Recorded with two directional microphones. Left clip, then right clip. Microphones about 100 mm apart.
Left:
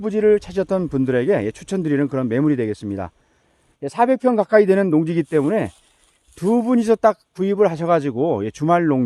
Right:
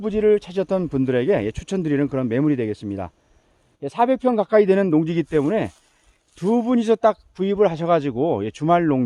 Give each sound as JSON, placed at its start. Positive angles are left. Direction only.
{"t": 0.0, "sound": "speech", "side_deg": 40}